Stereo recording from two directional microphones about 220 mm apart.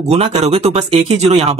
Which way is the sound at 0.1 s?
30° right (ahead or behind).